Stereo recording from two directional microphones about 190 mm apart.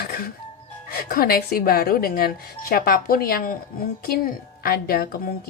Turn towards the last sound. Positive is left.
turn(degrees=50)  # may be behind; listen again after turning